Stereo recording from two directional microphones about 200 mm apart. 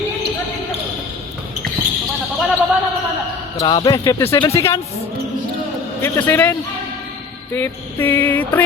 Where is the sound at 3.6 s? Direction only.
20° left (ahead or behind).